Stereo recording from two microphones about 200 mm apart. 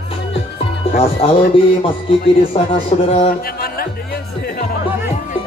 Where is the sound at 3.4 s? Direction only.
50° left (ahead or behind).